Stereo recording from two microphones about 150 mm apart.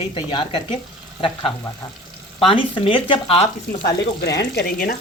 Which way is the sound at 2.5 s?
35° left (ahead or behind).